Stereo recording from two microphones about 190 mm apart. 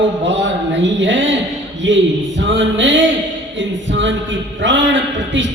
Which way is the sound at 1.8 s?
80° right.